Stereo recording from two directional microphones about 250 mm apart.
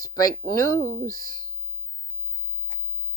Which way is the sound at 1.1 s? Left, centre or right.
Left.